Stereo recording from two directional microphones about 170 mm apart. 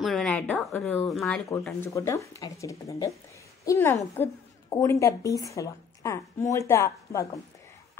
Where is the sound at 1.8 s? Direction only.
15° left (ahead or behind).